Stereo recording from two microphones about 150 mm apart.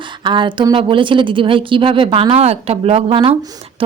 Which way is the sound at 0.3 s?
35° right (ahead or behind).